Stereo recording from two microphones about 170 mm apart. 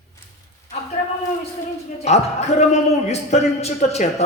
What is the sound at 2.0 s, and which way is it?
A man's voice, 40° left (ahead or behind).